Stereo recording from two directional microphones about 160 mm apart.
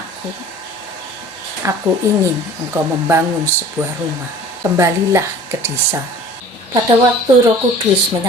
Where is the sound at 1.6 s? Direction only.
15° right (ahead or behind).